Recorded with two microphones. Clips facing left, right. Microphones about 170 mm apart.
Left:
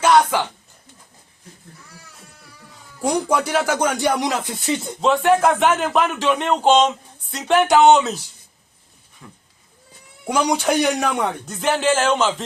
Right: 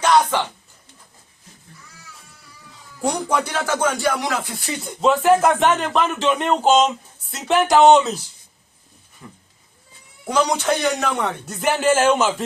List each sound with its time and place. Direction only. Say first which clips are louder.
0.0 s speech: left 1 dB; 10° left (ahead or behind)
3.0 s speech: left 2 dB; 10° left (ahead or behind)
4.9 s speech: right 2 dB; centre (ahead or behind)
9.2 s speech: right 2 dB; 5° right (ahead or behind)
10.2 s speech: even; 10° left (ahead or behind)
11.4 s music: right 2 dB; 10° right (ahead or behind)